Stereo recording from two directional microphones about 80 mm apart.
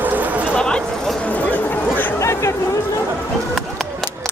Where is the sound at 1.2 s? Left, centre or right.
Centre.